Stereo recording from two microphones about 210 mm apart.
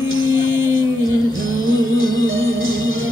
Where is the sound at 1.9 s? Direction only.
75° right (ahead or behind).